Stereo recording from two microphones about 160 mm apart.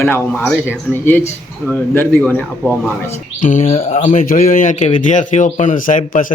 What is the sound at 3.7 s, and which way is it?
Speech, 40° left (ahead or behind).